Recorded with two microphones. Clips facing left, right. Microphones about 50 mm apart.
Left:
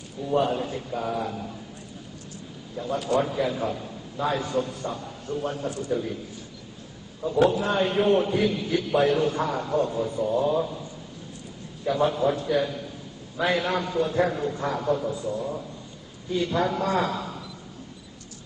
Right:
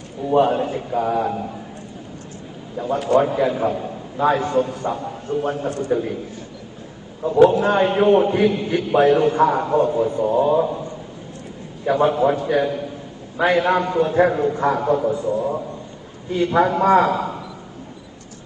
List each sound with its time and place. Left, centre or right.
0.3 s a man's voice: right
2.7 s a man's voice: right
7.2 s a man's voice: right
11.9 s a man's voice: right